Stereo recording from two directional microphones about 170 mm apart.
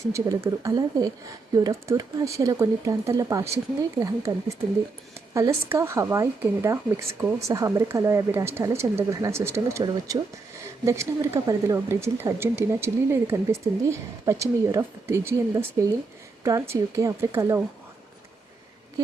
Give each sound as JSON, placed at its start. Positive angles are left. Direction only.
{"t": 0.1, "sound": "speech", "side_deg": -20}